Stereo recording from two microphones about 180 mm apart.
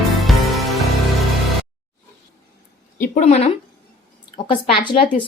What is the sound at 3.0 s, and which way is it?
Speech, 40° left (ahead or behind).